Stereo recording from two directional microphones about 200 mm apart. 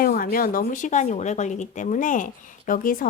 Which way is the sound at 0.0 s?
45° left (ahead or behind).